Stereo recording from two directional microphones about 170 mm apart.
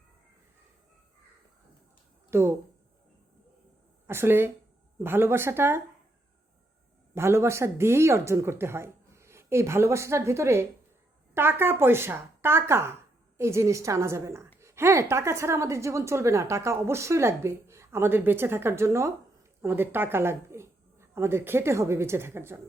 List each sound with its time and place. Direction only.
2.3 s a woman's voice: 15° right (ahead or behind)
4.0 s a woman's voice: 15° right (ahead or behind)
7.1 s a woman's voice: 15° right (ahead or behind)